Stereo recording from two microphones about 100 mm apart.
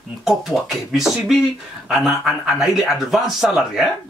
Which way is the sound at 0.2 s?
Centre (ahead or behind).